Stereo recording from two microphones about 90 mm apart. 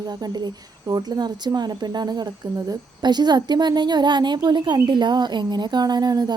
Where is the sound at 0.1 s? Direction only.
50° right (ahead or behind).